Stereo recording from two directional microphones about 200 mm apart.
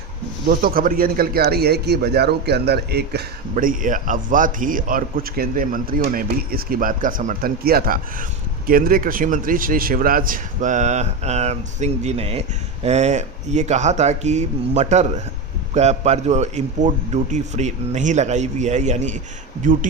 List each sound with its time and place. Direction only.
0.4 s a man's voice: 45° right (ahead or behind)
3.5 s a man's voice: 40° right (ahead or behind)